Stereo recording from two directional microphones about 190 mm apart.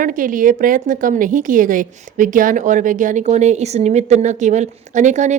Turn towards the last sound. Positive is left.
turn(degrees=-40)  # may be behind; listen again after turning